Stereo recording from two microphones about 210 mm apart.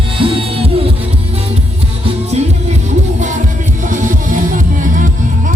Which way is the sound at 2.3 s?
30° right (ahead or behind).